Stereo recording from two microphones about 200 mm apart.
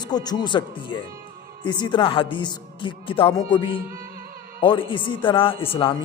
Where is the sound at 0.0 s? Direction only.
20° left (ahead or behind).